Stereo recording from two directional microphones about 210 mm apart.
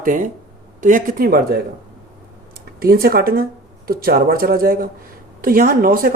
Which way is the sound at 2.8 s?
45° right (ahead or behind).